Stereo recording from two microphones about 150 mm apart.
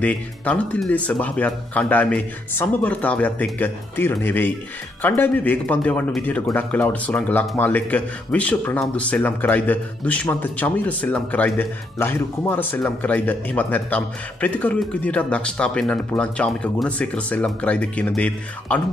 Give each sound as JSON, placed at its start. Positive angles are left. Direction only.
{"t": 0.0, "sound": "a man's voice", "side_deg": 10}